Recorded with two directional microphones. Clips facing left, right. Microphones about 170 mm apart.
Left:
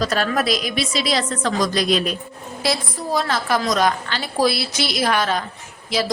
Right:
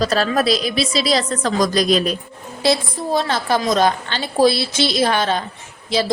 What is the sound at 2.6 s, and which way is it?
A woman's voice, 25° right (ahead or behind).